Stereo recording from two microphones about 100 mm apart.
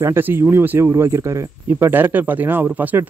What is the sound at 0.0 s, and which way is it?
Speech, 20° right (ahead or behind).